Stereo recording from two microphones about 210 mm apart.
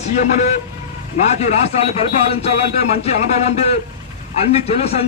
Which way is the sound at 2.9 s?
30° left (ahead or behind).